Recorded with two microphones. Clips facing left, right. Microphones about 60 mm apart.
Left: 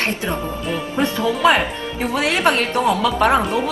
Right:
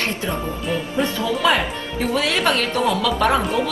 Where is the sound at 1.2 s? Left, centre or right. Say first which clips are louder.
Left 4 dB; left.